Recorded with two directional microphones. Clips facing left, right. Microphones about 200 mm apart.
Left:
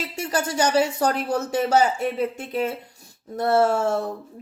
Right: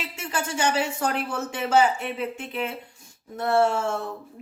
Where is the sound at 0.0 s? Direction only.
40° left (ahead or behind).